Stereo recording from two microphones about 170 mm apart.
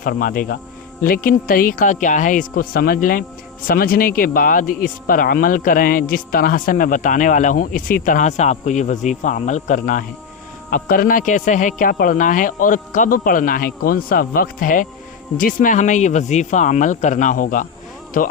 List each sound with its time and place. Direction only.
0.0 s speech: 55° left (ahead or behind)